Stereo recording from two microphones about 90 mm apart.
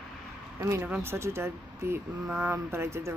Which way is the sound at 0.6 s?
30° right (ahead or behind).